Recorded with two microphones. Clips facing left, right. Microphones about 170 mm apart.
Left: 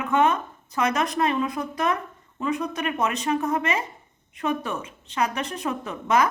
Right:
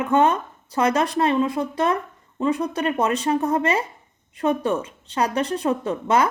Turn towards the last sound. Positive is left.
turn(degrees=-30)  # may be behind; listen again after turning